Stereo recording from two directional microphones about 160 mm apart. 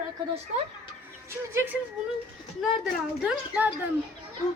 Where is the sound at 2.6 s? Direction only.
5° right (ahead or behind).